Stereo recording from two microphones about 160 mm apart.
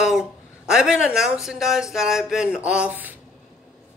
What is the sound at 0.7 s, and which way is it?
Speech, 5° right (ahead or behind).